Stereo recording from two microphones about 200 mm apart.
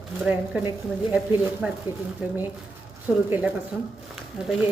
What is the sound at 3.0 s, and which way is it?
A woman's voice, 10° right (ahead or behind).